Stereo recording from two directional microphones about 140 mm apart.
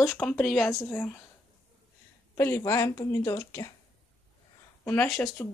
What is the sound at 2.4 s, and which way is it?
Speech, 20° left (ahead or behind).